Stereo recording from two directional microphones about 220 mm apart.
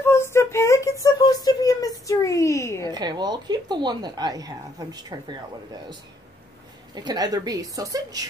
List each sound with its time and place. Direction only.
0.0 s a sound: 10° left (ahead or behind)
2.9 s speech: 20° right (ahead or behind)
7.0 s a woman's voice: 15° right (ahead or behind)